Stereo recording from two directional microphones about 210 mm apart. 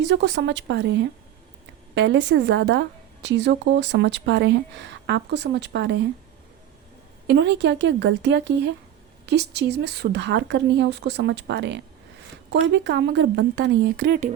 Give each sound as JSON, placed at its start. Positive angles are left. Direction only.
{"t": 0.0, "sound": "a woman's voice", "side_deg": -55}
{"t": 7.3, "sound": "a woman's voice", "side_deg": -55}